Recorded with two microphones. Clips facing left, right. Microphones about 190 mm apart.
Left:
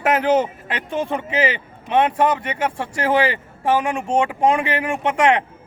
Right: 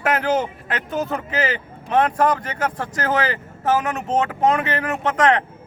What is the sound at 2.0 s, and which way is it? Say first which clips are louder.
Speech: left 1 dB; 10° left (ahead or behind).